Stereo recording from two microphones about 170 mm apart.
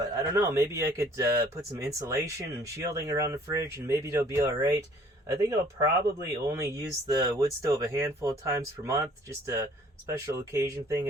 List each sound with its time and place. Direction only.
0.2 s speech: 20° right (ahead or behind)
10.1 s speech: 15° right (ahead or behind)